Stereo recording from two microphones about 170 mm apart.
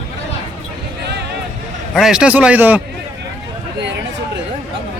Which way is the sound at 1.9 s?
5° right (ahead or behind).